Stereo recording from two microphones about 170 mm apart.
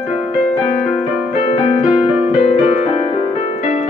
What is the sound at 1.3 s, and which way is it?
Keyboard, 35° left (ahead or behind).